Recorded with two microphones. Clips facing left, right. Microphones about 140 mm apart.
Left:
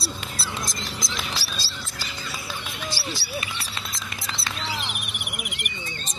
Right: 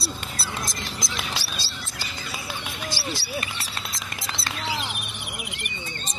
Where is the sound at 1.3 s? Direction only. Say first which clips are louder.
Even; 25° right (ahead or behind).